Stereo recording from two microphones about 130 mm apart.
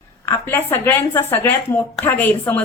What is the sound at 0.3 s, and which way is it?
Speech, 15° left (ahead or behind).